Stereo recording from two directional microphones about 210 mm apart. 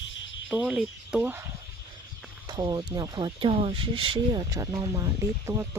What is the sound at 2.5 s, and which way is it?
Speech, 20° right (ahead or behind).